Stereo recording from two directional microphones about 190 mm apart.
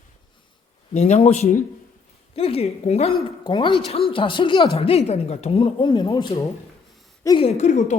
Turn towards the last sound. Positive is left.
turn(degrees=35)  # may be behind; listen again after turning